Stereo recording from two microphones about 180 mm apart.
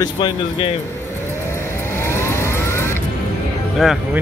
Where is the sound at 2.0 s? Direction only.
15° left (ahead or behind).